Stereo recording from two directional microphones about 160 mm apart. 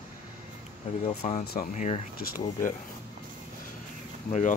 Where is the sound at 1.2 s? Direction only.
45° left (ahead or behind).